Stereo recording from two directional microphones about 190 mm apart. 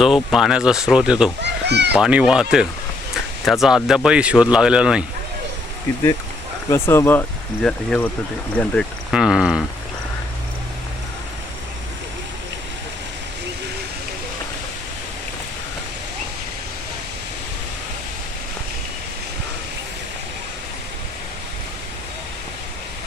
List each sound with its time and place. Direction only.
0.0 s speech: centre (ahead or behind)
1.4 s children playing: 65° right (ahead or behind)
1.9 s speech: 5° right (ahead or behind)
6.7 s speech: 10° left (ahead or behind)
8.5 s a sound: 5° left (ahead or behind)